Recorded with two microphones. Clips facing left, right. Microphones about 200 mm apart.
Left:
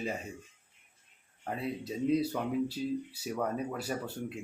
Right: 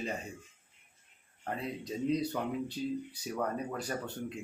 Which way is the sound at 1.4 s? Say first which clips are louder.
Left 2 dB; 5° left (ahead or behind).